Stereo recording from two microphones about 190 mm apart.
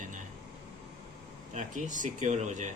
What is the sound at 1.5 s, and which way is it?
A man's voice, 40° right (ahead or behind).